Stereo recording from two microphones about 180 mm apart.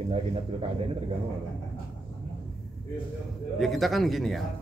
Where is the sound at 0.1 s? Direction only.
35° right (ahead or behind).